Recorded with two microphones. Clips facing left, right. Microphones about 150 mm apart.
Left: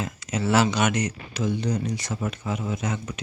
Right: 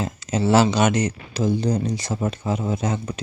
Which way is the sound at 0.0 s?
30° right (ahead or behind).